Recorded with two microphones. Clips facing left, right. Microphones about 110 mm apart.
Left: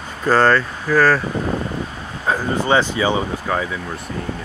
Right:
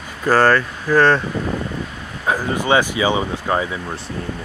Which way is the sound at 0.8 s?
20° right (ahead or behind).